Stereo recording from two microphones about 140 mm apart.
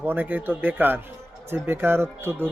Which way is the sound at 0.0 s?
15° right (ahead or behind).